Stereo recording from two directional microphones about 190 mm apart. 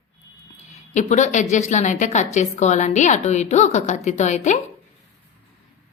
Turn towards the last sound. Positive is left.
turn(degrees=40)  # may be behind; listen again after turning